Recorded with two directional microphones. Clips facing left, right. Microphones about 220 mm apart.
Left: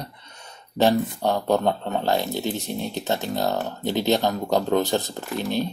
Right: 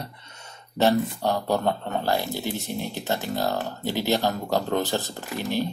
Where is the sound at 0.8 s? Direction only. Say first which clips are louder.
Left 1 dB; 15° left (ahead or behind).